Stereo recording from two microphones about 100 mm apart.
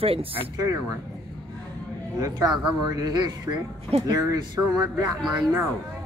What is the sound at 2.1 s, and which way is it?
Speech, 35° right (ahead or behind).